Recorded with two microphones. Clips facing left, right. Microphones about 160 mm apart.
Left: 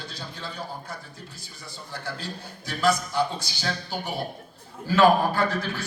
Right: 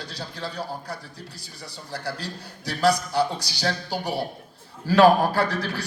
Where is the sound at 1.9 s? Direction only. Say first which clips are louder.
Right 3 dB; 35° right (ahead or behind).